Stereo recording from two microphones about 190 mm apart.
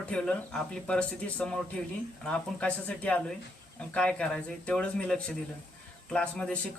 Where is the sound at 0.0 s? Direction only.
5° left (ahead or behind).